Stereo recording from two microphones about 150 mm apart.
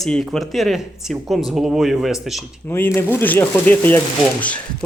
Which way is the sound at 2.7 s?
15° left (ahead or behind).